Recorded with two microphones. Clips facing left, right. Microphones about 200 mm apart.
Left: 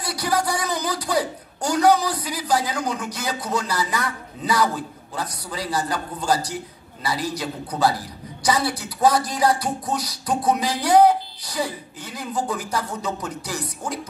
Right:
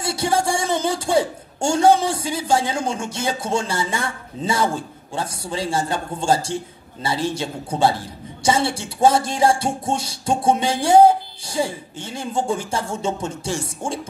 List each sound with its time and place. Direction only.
0.0 s a man's voice: 25° right (ahead or behind)